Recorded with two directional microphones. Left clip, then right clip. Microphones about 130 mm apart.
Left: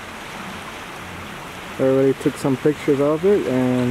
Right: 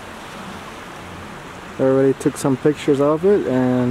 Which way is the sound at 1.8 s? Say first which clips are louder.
Right 1 dB; 10° right (ahead or behind).